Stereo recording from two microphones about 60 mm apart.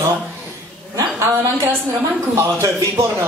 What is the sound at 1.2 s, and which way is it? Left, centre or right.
A woman's voice, right.